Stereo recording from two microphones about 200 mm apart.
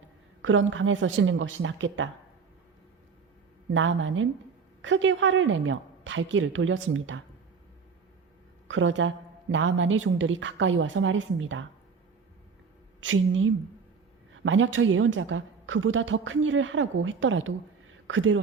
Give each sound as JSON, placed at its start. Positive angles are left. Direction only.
{"t": 0.4, "sound": "a woman's voice", "side_deg": -75}
{"t": 3.7, "sound": "a woman's voice", "side_deg": -70}
{"t": 8.6, "sound": "a woman's voice", "side_deg": -70}
{"t": 13.0, "sound": "a woman's voice", "side_deg": -75}